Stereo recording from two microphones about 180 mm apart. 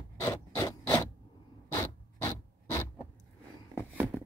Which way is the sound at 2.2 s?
15° left (ahead or behind).